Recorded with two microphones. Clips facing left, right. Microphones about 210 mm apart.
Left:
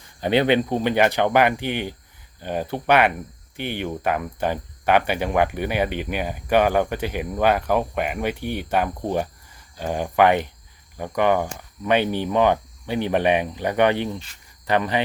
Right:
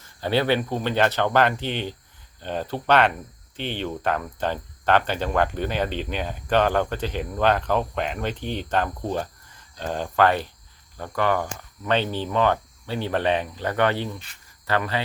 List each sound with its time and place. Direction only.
0.0 s speech: 20° left (ahead or behind)